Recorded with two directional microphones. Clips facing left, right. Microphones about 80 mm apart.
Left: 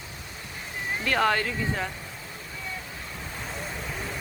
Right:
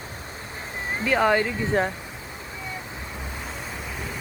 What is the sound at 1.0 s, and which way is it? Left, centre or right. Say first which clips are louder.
Speech: right 4 dB; centre.